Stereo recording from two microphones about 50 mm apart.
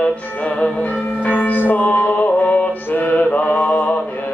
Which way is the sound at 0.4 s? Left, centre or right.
Left.